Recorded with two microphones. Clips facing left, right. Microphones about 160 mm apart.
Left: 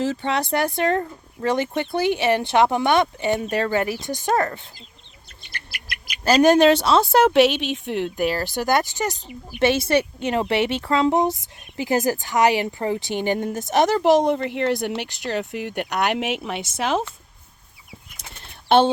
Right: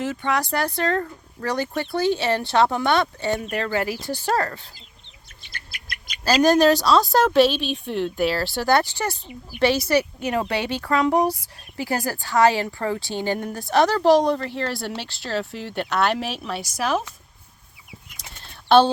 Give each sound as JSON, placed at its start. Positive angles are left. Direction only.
{"t": 0.0, "sound": "speech", "side_deg": 30}
{"t": 6.2, "sound": "speech", "side_deg": 20}
{"t": 7.7, "sound": "speech", "side_deg": 65}
{"t": 8.3, "sound": "speech", "side_deg": 15}